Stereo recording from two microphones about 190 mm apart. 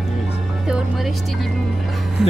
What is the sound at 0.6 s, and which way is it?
Speech, 5° right (ahead or behind).